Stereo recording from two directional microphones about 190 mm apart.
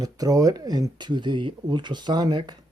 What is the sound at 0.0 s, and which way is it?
Speech, 20° right (ahead or behind).